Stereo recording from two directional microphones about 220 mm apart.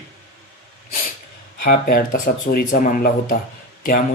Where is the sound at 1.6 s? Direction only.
40° left (ahead or behind).